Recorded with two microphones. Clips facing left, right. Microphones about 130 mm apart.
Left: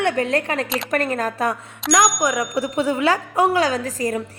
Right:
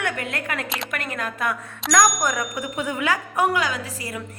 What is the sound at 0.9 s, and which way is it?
Speech, 35° left (ahead or behind).